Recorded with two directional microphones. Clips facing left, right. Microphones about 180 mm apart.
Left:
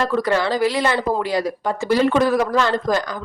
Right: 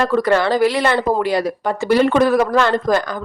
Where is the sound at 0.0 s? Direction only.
60° right (ahead or behind).